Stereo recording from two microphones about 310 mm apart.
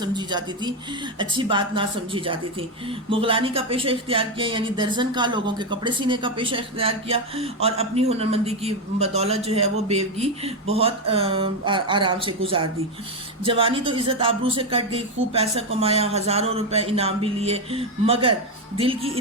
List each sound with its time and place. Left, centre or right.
0.0 s speech: centre